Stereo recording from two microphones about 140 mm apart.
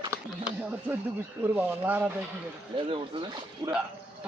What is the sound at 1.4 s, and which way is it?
Speech, 10° right (ahead or behind).